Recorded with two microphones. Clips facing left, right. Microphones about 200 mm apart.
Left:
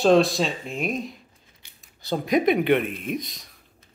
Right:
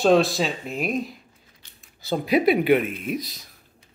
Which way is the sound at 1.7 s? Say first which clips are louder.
Right 1 dB; centre (ahead or behind).